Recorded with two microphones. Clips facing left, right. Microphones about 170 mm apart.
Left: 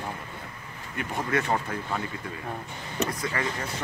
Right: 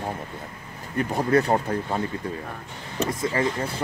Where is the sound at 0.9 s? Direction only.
35° right (ahead or behind).